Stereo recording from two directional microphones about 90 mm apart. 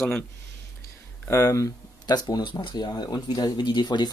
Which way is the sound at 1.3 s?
35° left (ahead or behind).